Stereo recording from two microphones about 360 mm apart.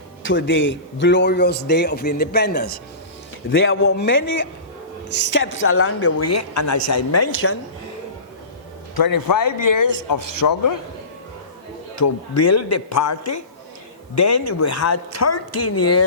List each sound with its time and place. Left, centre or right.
0.2 s a man's voice: left
9.0 s a man's voice: left
11.9 s speech: left